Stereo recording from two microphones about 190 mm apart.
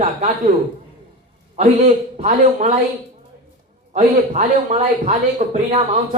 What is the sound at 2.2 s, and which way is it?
Speech, 40° right (ahead or behind).